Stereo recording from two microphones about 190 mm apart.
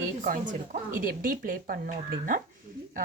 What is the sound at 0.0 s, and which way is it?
Speech, 45° right (ahead or behind).